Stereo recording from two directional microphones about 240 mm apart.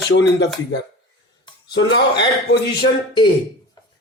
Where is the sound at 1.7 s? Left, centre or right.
Left.